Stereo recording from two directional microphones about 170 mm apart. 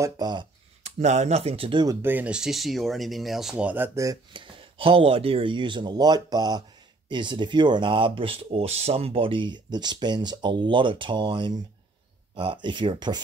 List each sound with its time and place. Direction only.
0.0 s speech: 25° right (ahead or behind)
0.8 s speech: 45° right (ahead or behind); by 2.0 s 25° right (ahead or behind)
2.0 s speech: 10° right (ahead or behind); by 13.2 s 25° right (ahead or behind)